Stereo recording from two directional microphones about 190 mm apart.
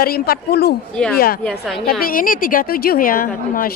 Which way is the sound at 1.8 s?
50° left (ahead or behind).